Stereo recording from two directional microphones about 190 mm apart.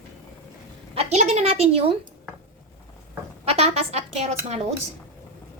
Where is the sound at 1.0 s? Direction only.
35° right (ahead or behind).